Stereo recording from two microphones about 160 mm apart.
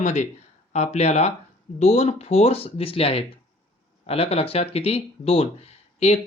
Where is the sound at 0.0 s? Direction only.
45° left (ahead or behind).